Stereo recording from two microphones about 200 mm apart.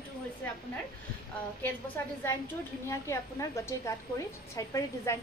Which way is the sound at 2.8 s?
15° left (ahead or behind).